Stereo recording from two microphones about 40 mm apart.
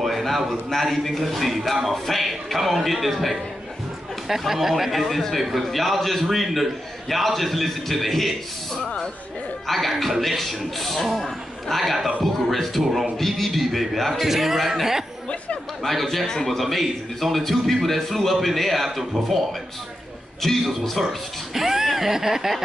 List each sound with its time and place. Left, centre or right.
0.0 s speech: centre
8.8 s speech: centre
9.7 s speech: centre
15.8 s speech: centre
20.4 s a man's voice: centre